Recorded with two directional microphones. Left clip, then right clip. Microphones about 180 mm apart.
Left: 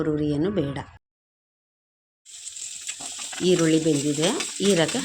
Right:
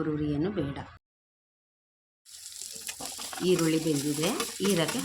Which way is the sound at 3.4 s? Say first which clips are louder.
Left 6 dB; 40° left (ahead or behind).